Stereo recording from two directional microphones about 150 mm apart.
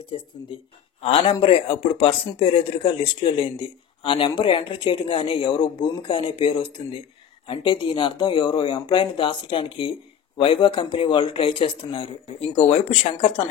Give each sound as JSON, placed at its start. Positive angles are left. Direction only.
{"t": 1.0, "sound": "speech", "side_deg": 35}